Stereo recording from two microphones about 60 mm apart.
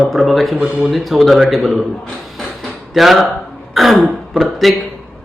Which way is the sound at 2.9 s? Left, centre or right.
Centre.